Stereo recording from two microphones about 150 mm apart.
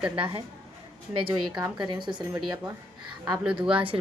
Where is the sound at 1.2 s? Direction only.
30° right (ahead or behind).